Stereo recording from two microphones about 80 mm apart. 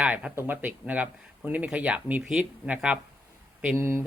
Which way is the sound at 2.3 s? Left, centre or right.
Centre.